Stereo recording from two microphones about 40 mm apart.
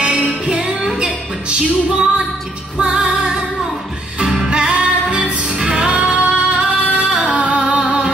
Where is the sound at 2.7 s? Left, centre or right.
Right.